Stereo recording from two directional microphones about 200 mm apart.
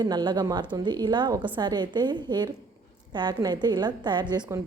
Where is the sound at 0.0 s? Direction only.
20° right (ahead or behind).